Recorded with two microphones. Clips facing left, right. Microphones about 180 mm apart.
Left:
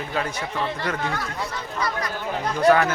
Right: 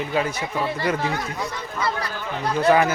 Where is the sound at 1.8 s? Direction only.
30° right (ahead or behind).